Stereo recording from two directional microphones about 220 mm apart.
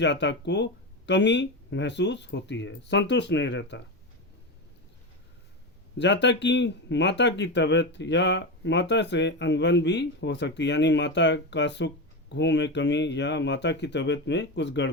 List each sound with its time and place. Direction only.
0.0 s speech: 55° left (ahead or behind)
6.0 s speech: 50° left (ahead or behind)